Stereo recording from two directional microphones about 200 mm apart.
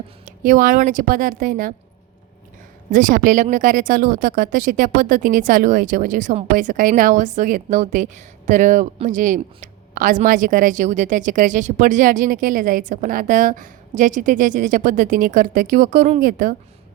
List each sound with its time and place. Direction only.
0.3 s speech: 40° right (ahead or behind)
2.9 s speech: 40° right (ahead or behind)